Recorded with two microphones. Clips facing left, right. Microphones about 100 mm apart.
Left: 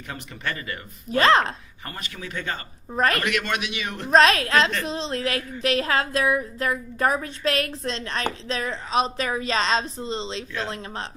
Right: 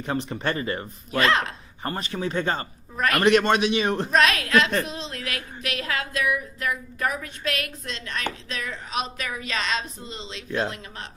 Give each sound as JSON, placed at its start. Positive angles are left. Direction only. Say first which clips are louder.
{"t": 0.0, "sound": "speech", "louder": "right 6 dB", "side_deg": -30}
{"t": 1.2, "sound": "a woman's voice", "louder": "left 4 dB", "side_deg": 35}
{"t": 1.8, "sound": "speech", "louder": "right 10 dB", "side_deg": -35}
{"t": 2.9, "sound": "a woman's voice", "louder": "left 3 dB", "side_deg": 35}
{"t": 3.2, "sound": "speech", "louder": "right 7 dB", "side_deg": -30}
{"t": 4.1, "sound": "a woman's voice", "louder": "left 5 dB", "side_deg": 35}